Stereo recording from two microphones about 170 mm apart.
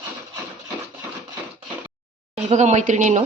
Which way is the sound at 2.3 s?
45° right (ahead or behind).